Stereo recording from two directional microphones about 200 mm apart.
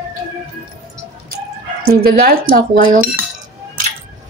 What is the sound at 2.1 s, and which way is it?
Speech, 50° right (ahead or behind).